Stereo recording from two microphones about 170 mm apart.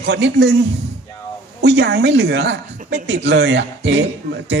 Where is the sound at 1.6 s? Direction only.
80° right.